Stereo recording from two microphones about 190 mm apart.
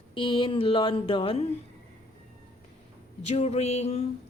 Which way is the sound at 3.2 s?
35° left (ahead or behind).